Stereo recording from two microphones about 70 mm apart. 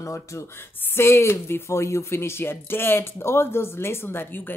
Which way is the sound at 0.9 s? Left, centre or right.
Left.